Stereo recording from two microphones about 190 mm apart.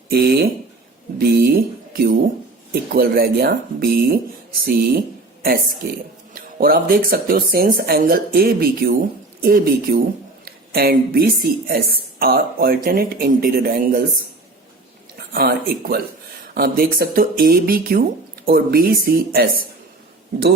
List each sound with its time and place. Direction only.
0.1 s a woman's voice: 55° right (ahead or behind)
15.3 s a woman's voice: 50° right (ahead or behind)